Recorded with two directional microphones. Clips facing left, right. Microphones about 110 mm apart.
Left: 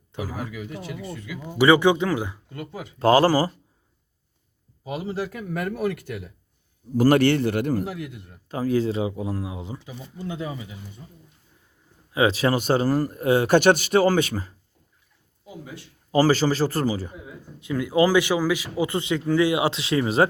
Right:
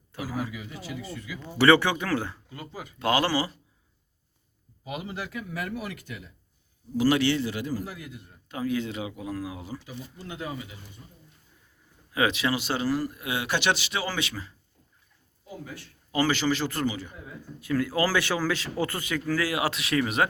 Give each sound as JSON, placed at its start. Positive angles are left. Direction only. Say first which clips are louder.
{"t": 0.1, "sound": "a man's voice", "louder": "left 3 dB", "side_deg": 20}
{"t": 0.5, "sound": "a man's voice", "louder": "left 4 dB", "side_deg": 55}
{"t": 1.4, "sound": "a man's voice", "louder": "left 2 dB", "side_deg": 15}
{"t": 3.0, "sound": "speech", "louder": "left 8 dB", "side_deg": 35}
{"t": 4.9, "sound": "speech", "louder": "left 6 dB", "side_deg": 35}
{"t": 6.9, "sound": "a man's voice", "louder": "left 5 dB", "side_deg": 50}
{"t": 8.4, "sound": "speech", "louder": "left 6 dB", "side_deg": 35}
{"t": 12.1, "sound": "speech", "louder": "left 5 dB", "side_deg": 25}
{"t": 12.4, "sound": "speech", "louder": "left 7 dB", "side_deg": 45}
{"t": 15.4, "sound": "speech", "louder": "left 1 dB", "side_deg": 15}
{"t": 16.1, "sound": "speech", "louder": "left 6 dB", "side_deg": 35}
{"t": 17.2, "sound": "a man's voice", "louder": "left 1 dB", "side_deg": 20}
{"t": 18.9, "sound": "speech", "louder": "left 7 dB", "side_deg": 25}